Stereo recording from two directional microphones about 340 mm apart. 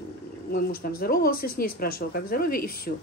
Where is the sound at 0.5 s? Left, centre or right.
Left.